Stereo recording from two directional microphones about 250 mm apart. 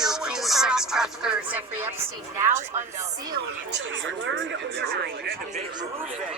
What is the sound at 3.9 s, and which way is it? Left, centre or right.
Speech, right.